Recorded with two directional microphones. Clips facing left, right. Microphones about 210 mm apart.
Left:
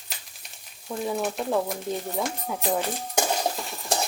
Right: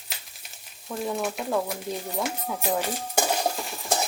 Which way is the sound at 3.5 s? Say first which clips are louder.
Even; centre (ahead or behind).